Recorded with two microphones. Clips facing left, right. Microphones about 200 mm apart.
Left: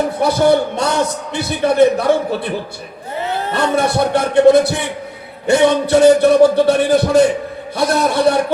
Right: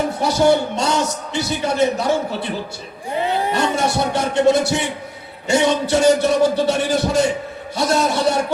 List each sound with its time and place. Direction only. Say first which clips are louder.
0.2 s a man's voice: left 2 dB; 55° left (ahead or behind)
3.2 s a sound: right 1 dB; 15° right (ahead or behind)
3.5 s a man's voice: left 3 dB; 55° left (ahead or behind)